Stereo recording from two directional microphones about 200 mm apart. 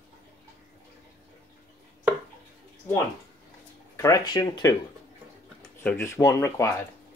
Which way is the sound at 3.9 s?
15° left (ahead or behind).